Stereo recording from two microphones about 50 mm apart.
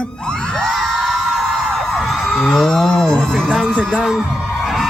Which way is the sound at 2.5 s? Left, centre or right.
Centre.